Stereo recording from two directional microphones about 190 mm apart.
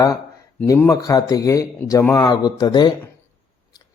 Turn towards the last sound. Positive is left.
turn(degrees=20)  # may be behind; listen again after turning